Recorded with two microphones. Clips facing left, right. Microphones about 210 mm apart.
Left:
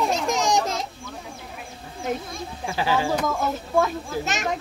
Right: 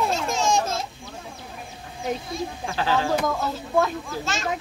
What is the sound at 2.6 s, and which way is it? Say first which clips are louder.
Speech: left 2 dB; 15° left (ahead or behind).